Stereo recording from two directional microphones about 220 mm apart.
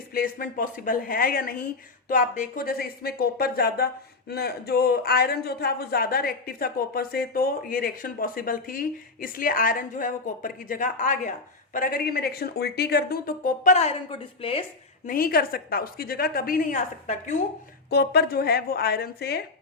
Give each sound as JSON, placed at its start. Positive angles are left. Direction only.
{"t": 0.1, "sound": "a woman's voice", "side_deg": 40}
{"t": 15.0, "sound": "speech", "side_deg": 40}
{"t": 17.8, "sound": "speech", "side_deg": 45}